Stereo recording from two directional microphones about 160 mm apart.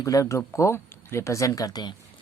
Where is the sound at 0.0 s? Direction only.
20° left (ahead or behind).